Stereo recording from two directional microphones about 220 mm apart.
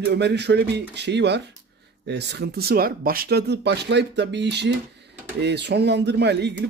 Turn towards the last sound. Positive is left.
turn(degrees=-50)  # may be behind; listen again after turning